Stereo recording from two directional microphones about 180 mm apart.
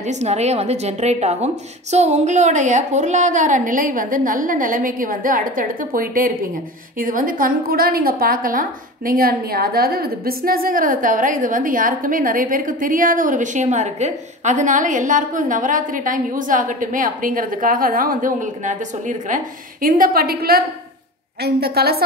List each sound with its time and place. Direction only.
0.0 s a woman's voice: 40° right (ahead or behind); by 22.0 s 60° right (ahead or behind)